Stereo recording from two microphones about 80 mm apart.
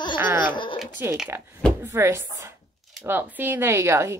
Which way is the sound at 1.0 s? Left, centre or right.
Right.